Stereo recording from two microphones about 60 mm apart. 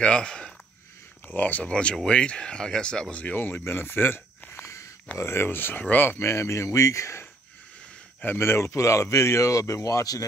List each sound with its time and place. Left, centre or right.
0.0 s speech: centre
1.2 s speech: left
3.3 s speech: left
8.4 s speech: left